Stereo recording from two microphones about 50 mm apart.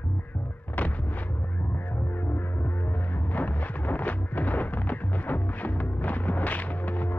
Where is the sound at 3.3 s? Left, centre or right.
Left.